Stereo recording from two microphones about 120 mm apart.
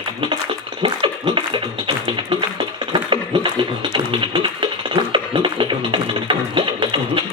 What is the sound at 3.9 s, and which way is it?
Music, 45° right (ahead or behind).